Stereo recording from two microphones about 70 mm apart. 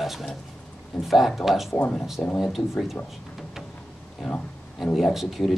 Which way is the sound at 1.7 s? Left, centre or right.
Left.